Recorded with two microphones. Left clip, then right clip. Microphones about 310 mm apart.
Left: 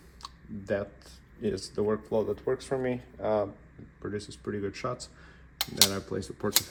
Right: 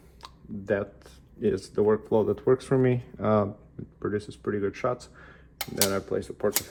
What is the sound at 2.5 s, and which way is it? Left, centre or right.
Speech, right.